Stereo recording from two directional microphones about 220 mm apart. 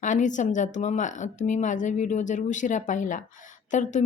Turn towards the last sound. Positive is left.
turn(degrees=35)  # may be behind; listen again after turning